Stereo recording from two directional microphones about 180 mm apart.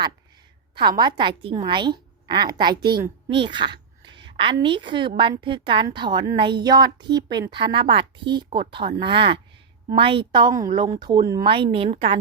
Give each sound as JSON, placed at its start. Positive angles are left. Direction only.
{"t": 0.8, "sound": "a woman's voice", "side_deg": -25}